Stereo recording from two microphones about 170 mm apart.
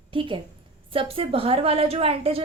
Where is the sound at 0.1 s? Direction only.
30° right (ahead or behind).